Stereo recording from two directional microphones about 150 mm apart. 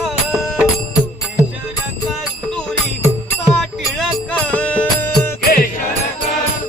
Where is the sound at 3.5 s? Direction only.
5° left (ahead or behind).